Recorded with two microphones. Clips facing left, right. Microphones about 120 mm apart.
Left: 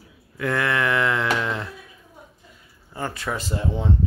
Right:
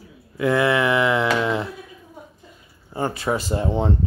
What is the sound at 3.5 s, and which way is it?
Speech, 35° right (ahead or behind).